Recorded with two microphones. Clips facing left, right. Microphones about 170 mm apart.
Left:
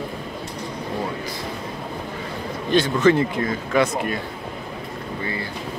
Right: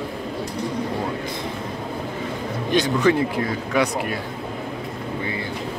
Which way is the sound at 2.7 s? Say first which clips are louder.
Left 2 dB; 15° right (ahead or behind).